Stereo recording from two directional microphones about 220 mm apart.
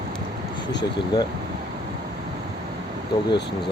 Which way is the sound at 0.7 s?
20° left (ahead or behind).